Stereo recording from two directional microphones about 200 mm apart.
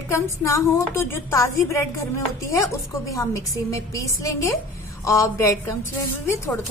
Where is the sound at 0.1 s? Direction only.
15° left (ahead or behind).